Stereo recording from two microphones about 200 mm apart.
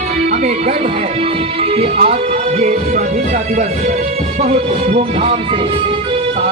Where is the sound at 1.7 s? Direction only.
30° right (ahead or behind).